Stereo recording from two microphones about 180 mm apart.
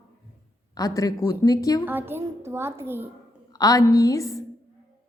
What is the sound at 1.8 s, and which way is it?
A woman's voice, 10° right (ahead or behind).